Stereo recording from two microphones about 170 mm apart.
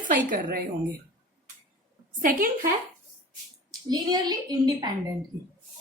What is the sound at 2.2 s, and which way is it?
Speech, 55° right (ahead or behind).